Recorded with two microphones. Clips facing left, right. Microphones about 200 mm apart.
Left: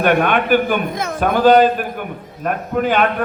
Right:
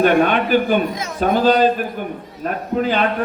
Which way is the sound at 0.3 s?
55° left (ahead or behind).